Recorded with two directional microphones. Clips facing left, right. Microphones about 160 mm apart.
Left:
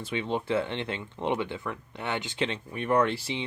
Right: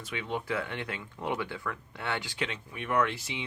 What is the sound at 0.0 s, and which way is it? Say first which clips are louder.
Speech: left 5 dB; 30° left (ahead or behind).